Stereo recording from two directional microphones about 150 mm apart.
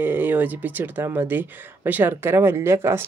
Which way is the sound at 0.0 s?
15° right (ahead or behind).